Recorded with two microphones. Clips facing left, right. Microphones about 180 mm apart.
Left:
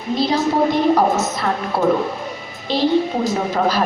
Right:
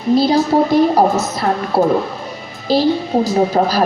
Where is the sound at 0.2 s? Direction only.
35° right (ahead or behind).